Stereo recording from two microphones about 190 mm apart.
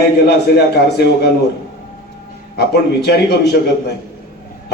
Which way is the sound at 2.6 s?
60° left (ahead or behind).